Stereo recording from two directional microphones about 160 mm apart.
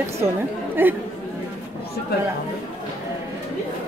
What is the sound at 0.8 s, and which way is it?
Speech, 15° right (ahead or behind).